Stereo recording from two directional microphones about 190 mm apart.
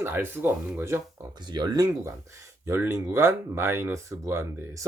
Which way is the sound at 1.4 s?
20° right (ahead or behind).